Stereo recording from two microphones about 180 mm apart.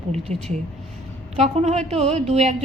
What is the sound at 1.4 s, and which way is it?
A woman's voice, 40° right (ahead or behind).